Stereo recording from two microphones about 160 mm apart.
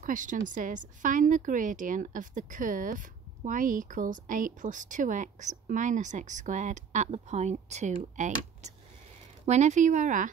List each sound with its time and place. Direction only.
0.0 s a woman's voice: 55° right (ahead or behind)